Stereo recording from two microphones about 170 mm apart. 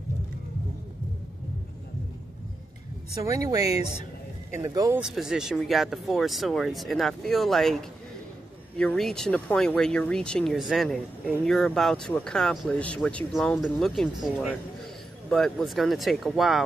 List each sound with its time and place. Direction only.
3.3 s speech: 20° right (ahead or behind)
5.0 s speech: 5° right (ahead or behind)